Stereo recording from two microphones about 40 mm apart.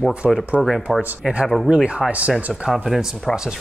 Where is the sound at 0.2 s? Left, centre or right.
Right.